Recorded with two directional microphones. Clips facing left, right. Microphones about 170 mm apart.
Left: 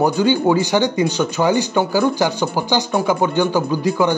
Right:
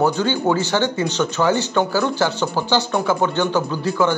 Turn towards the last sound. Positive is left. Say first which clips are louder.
# left 2 dB
turn(degrees=15)  # may be behind; listen again after turning